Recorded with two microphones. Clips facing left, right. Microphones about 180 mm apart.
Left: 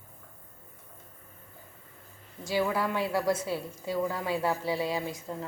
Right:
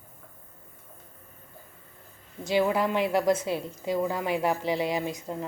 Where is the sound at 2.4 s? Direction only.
20° right (ahead or behind).